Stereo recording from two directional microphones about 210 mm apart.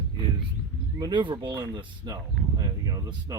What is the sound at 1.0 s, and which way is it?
Speech, 20° right (ahead or behind).